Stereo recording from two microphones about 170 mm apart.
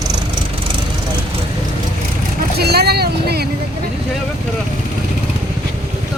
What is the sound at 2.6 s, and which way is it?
Speech, 70° right (ahead or behind).